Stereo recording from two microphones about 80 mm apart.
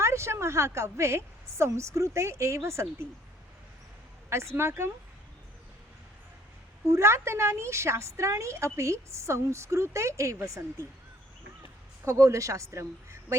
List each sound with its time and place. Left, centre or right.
0.0 s a woman's voice: right
4.3 s a woman's voice: right
6.8 s a woman's voice: right
12.0 s a woman's voice: right